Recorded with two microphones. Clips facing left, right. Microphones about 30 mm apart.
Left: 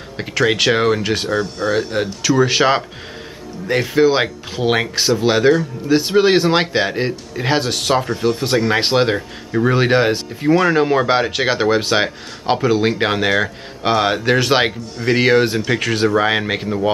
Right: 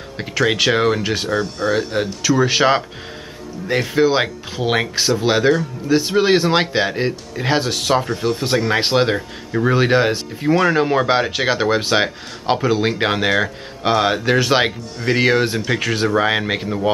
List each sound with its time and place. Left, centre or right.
0.2 s speech: centre